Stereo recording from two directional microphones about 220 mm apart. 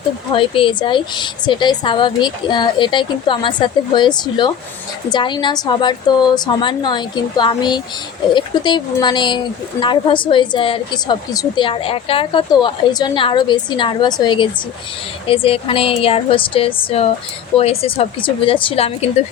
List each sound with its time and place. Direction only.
0.3 s speech: 25° left (ahead or behind)